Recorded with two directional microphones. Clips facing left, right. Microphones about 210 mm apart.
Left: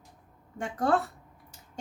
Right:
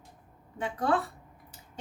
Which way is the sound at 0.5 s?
45° left (ahead or behind).